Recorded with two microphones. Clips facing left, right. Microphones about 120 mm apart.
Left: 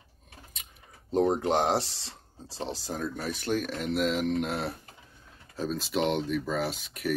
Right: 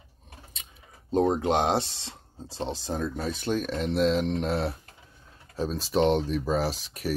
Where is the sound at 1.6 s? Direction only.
20° right (ahead or behind).